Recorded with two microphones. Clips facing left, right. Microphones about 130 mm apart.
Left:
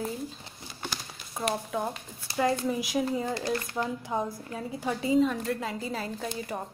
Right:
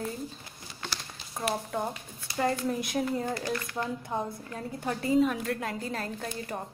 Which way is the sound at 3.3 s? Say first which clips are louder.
Left 2 dB; 25° left (ahead or behind).